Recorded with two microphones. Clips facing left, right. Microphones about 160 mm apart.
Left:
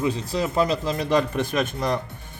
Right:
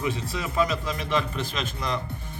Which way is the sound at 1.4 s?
55° left (ahead or behind).